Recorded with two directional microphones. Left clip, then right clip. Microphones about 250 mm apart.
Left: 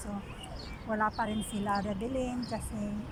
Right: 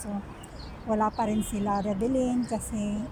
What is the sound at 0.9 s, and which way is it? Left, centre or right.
A woman's voice, centre.